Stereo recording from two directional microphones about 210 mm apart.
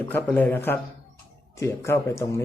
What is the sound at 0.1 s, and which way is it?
A man's voice, 10° left (ahead or behind).